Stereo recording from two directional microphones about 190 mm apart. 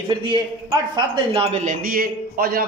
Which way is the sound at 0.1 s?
25° right (ahead or behind).